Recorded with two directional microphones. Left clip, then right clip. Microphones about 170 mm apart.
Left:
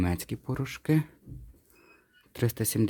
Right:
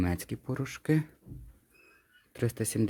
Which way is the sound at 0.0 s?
5° left (ahead or behind).